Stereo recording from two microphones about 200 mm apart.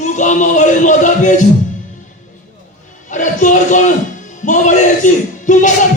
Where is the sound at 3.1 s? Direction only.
40° left (ahead or behind).